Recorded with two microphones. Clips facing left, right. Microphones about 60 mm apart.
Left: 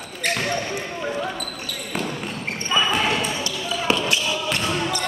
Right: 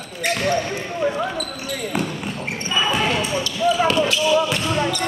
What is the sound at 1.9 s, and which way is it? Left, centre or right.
Basketball bounce, centre.